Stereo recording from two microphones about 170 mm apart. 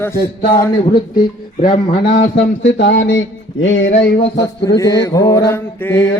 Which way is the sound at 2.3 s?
90° left.